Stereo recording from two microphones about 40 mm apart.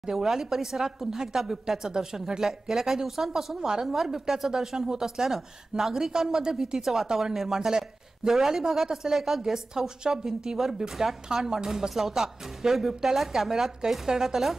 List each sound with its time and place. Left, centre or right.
0.0 s a woman's voice: centre